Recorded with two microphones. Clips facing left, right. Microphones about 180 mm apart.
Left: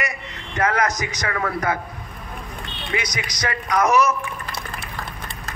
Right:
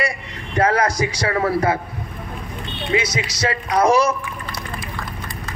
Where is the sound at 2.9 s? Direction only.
25° right (ahead or behind).